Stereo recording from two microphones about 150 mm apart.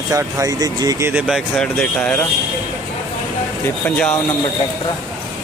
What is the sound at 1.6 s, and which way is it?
Speech, 5° left (ahead or behind).